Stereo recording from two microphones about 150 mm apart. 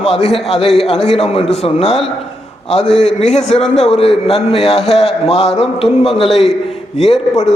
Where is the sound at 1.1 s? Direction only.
45° left (ahead or behind).